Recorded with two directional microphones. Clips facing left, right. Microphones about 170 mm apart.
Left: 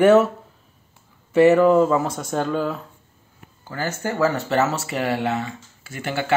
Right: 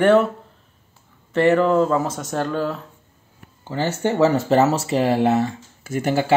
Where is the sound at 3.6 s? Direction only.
25° right (ahead or behind).